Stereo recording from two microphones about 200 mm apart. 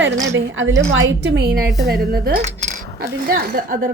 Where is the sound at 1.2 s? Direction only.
55° right (ahead or behind).